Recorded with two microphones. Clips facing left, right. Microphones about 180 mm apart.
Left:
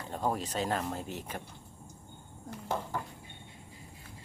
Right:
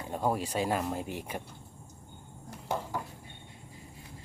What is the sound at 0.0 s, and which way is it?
Speech, 10° right (ahead or behind).